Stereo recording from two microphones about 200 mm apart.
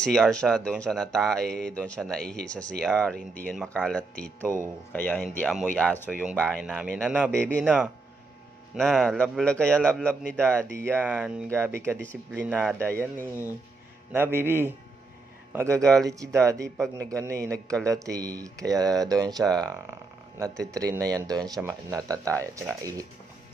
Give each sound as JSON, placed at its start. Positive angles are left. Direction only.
{"t": 0.0, "sound": "speech", "side_deg": 5}
{"t": 10.7, "sound": "speech", "side_deg": -10}
{"t": 15.8, "sound": "speech", "side_deg": 5}
{"t": 16.1, "sound": "speech", "side_deg": -15}